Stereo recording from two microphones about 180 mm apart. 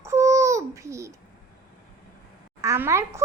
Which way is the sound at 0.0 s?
15° right (ahead or behind).